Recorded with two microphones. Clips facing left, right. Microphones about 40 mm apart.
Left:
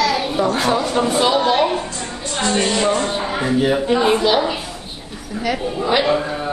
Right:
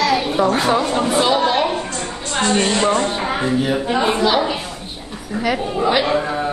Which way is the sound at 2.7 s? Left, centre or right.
Right.